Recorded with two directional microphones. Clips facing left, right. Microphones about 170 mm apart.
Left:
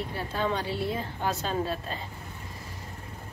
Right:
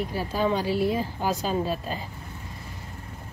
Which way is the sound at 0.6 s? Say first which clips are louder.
Right 7 dB; 25° left (ahead or behind).